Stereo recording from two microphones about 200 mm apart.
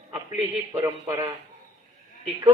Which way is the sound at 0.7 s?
15° right (ahead or behind).